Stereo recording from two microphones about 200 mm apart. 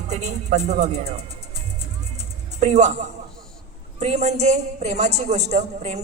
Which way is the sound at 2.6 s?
35° right (ahead or behind).